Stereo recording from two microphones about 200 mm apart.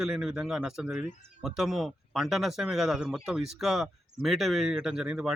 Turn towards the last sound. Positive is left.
turn(degrees=-5)  # may be behind; listen again after turning